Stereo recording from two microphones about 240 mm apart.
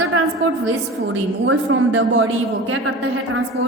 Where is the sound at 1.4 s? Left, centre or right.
Right.